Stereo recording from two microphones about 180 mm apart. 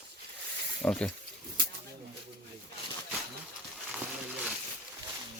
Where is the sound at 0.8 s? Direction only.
10° left (ahead or behind).